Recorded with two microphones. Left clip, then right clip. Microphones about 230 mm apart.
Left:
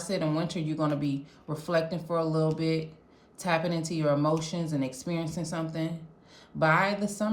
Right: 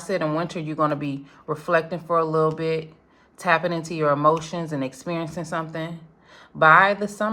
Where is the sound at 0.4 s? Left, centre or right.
Centre.